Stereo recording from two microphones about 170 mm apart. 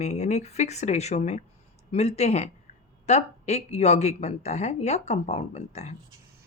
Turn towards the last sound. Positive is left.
turn(degrees=40)  # may be behind; listen again after turning